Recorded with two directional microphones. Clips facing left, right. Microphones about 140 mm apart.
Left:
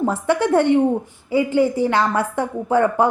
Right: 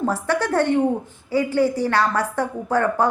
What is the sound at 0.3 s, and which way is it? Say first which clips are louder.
A woman's voice: left 5 dB; 15° left (ahead or behind).